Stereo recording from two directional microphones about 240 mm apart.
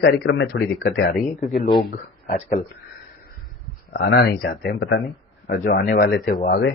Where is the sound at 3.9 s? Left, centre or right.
Left.